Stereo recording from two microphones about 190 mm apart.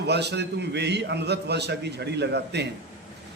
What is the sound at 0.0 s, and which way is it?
A man's voice, 60° right (ahead or behind).